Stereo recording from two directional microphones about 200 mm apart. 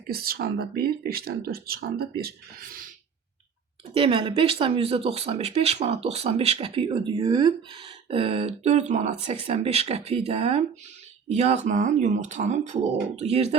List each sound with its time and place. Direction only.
0.1 s speech: 50° right (ahead or behind)
3.9 s speech: 25° right (ahead or behind)